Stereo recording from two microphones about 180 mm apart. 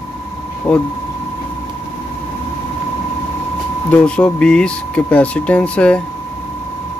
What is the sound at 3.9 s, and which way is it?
Speech, 5° left (ahead or behind).